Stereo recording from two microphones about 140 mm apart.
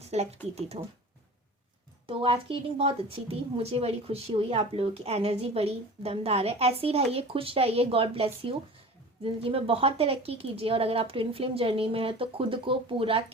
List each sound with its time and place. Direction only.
0.0 s a woman's voice: 50° right (ahead or behind)
2.0 s a woman's voice: 40° right (ahead or behind)